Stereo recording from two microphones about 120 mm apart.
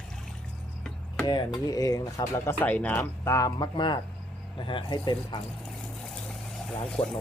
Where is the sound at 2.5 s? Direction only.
15° left (ahead or behind); by 5.4 s 40° left (ahead or behind).